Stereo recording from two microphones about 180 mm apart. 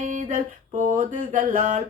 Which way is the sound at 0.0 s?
45° right (ahead or behind).